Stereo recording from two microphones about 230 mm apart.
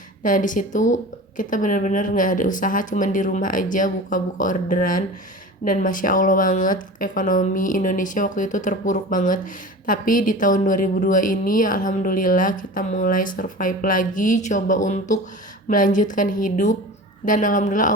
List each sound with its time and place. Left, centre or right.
0.2 s speech: left